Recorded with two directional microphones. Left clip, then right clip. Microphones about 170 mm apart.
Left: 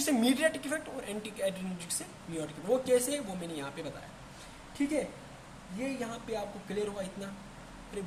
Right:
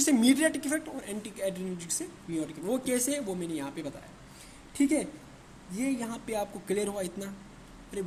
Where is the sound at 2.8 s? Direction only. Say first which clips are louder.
Left 3 dB; 50° right (ahead or behind).